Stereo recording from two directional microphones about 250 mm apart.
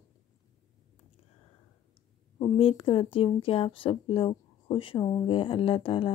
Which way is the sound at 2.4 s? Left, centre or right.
Left.